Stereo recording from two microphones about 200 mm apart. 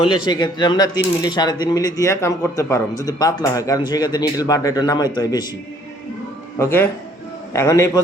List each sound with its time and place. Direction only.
0.3 s speech: 20° left (ahead or behind)
6.6 s a man's voice: 10° left (ahead or behind)